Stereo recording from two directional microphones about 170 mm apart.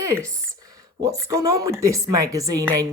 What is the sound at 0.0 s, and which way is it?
A woman's voice, 20° right (ahead or behind).